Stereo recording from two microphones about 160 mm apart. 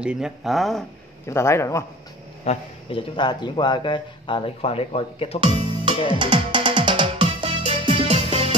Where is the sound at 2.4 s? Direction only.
40° left (ahead or behind).